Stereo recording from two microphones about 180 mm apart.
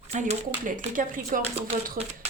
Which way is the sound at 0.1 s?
40° right (ahead or behind).